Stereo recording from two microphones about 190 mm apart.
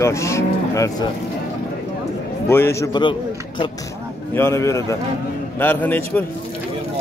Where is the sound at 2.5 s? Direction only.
15° left (ahead or behind).